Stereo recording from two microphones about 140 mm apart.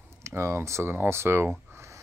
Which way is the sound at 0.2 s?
20° right (ahead or behind).